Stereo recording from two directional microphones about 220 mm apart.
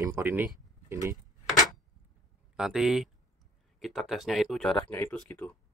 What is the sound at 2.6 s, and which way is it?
Speech, centre (ahead or behind).